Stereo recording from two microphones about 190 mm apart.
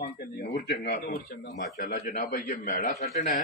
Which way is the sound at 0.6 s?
55° left (ahead or behind).